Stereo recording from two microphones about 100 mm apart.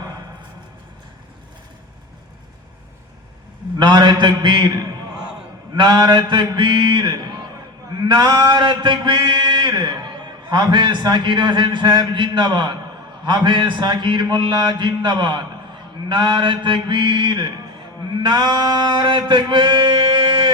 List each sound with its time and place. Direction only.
3.8 s a man's voice: 45° right (ahead or behind)
18.2 s male singing: 50° right (ahead or behind)